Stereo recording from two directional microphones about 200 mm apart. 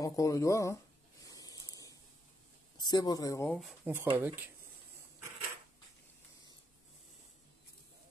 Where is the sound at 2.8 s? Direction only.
20° left (ahead or behind).